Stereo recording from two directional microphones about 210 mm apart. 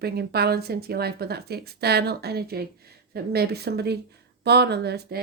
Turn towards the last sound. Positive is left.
turn(degrees=-50)  # may be behind; listen again after turning